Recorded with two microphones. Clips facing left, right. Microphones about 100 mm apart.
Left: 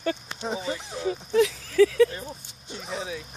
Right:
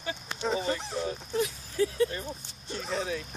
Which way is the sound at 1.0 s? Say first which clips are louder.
Left 11 dB; 90° left.